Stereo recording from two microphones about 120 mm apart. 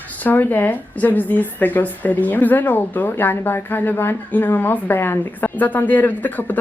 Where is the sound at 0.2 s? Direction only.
15° left (ahead or behind).